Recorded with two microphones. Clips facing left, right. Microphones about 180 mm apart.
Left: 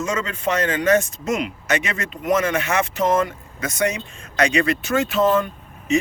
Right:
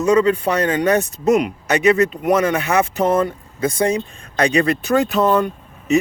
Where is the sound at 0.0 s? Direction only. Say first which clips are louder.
Right 9 dB; 35° right (ahead or behind).